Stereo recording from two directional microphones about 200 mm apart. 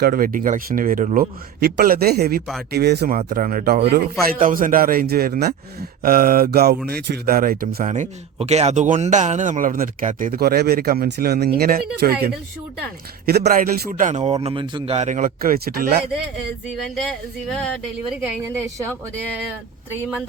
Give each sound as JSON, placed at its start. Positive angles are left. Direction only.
{"t": 0.0, "sound": "speech", "side_deg": -45}
{"t": 3.2, "sound": "speech", "side_deg": -45}
{"t": 7.8, "sound": "speech", "side_deg": -35}
{"t": 13.2, "sound": "speech", "side_deg": -50}
{"t": 14.4, "sound": "speech", "side_deg": -25}
{"t": 17.1, "sound": "speech", "side_deg": 0}